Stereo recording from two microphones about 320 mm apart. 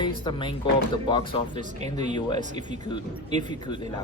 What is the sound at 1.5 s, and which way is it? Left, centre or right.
Speech, right.